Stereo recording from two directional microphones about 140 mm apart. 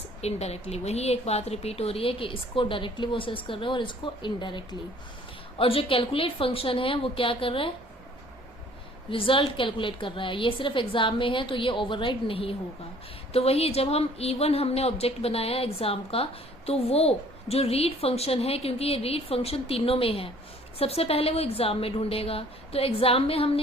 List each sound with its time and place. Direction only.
0.2 s a woman's voice: 50° left (ahead or behind)
9.0 s a woman's voice: 40° left (ahead or behind)